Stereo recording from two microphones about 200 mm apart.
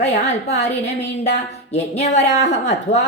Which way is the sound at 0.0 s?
35° left (ahead or behind).